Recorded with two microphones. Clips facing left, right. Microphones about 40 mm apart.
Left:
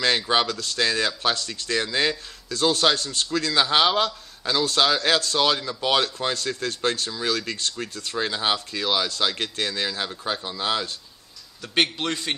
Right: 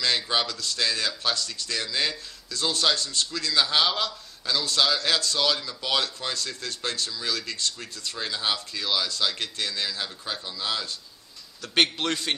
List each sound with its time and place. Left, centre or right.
0.0 s speech: left
11.6 s a man's voice: centre